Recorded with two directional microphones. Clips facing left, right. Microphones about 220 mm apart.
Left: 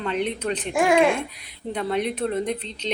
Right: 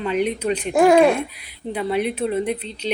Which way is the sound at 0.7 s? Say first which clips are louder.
Right 5 dB; 40° right (ahead or behind).